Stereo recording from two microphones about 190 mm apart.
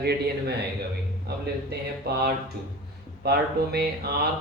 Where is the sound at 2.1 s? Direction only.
55° right (ahead or behind).